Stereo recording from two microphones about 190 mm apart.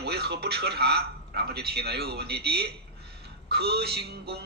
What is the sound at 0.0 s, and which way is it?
Speech, 60° right (ahead or behind).